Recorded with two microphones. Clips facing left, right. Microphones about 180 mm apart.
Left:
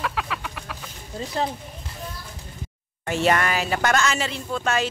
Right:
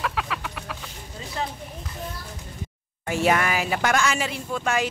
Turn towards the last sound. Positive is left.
turn(degrees=-10)  # may be behind; listen again after turning